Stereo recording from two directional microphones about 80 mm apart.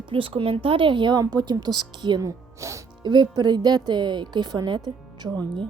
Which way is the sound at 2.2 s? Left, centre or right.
Right.